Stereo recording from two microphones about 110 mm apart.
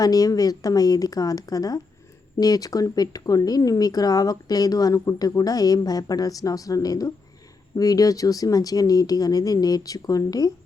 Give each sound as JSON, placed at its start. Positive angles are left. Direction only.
{"t": 0.0, "sound": "speech", "side_deg": 35}